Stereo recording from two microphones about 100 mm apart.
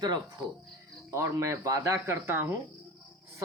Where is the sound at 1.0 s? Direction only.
30° right (ahead or behind).